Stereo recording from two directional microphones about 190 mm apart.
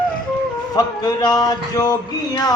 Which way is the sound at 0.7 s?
20° left (ahead or behind).